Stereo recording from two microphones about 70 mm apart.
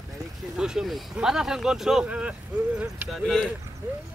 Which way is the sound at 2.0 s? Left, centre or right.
Centre.